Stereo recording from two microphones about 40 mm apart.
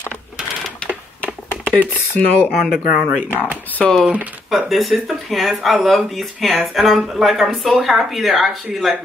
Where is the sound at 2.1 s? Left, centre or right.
Left.